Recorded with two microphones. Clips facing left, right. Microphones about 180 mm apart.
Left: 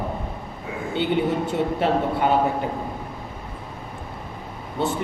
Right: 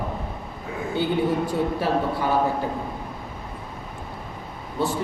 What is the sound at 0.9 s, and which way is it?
A man's voice, 25° left (ahead or behind).